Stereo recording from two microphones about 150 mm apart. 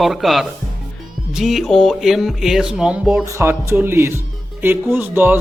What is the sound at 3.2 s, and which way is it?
Music, 20° right (ahead or behind).